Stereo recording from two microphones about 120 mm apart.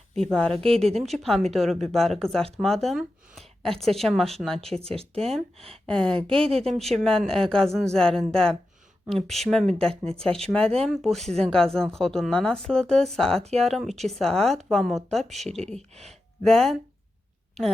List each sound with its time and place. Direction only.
0.2 s speech: 5° left (ahead or behind)
0.5 s speech: 50° right (ahead or behind)
1.0 s speech: centre (ahead or behind)
4.8 s speech: 55° right (ahead or behind)
5.8 s speech: 5° left (ahead or behind)
6.3 s speech: 55° right (ahead or behind)
6.7 s speech: centre (ahead or behind)